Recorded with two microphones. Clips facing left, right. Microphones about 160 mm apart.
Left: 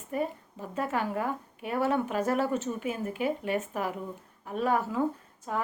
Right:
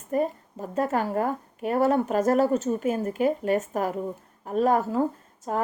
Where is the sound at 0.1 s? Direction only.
40° right (ahead or behind).